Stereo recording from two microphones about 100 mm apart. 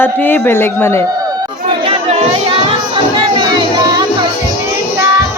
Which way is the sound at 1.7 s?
65° right (ahead or behind).